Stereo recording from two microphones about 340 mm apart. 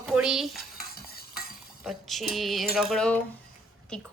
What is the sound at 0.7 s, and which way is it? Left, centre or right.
Stir, left.